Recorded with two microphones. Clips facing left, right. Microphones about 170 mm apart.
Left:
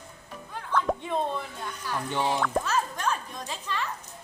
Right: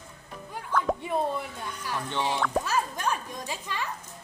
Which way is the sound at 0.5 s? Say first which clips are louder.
Even; 5° right (ahead or behind).